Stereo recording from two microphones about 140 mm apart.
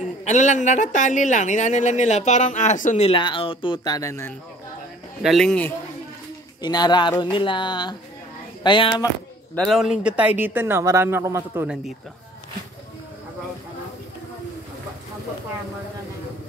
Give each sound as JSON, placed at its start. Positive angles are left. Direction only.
{"t": 0.2, "sound": "speech", "side_deg": 60}
{"t": 3.1, "sound": "speech", "side_deg": 35}
{"t": 5.2, "sound": "a man's voice", "side_deg": 0}
{"t": 6.6, "sound": "speech", "side_deg": 30}
{"t": 9.6, "sound": "speech", "side_deg": 0}
{"t": 11.6, "sound": "a man's voice", "side_deg": -5}